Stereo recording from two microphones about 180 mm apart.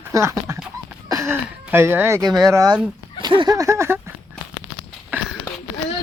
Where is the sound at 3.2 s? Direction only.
25° right (ahead or behind).